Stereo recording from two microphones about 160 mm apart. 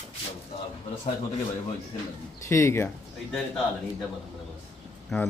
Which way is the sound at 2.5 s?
15° left (ahead or behind).